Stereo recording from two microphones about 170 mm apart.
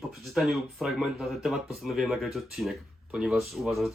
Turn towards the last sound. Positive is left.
turn(degrees=0)  # may be behind; listen again after turning